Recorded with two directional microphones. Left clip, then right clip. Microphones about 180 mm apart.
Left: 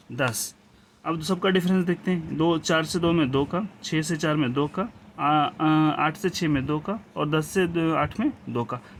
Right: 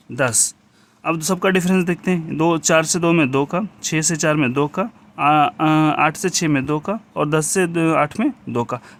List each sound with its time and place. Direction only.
0.2 s speech: 35° right (ahead or behind)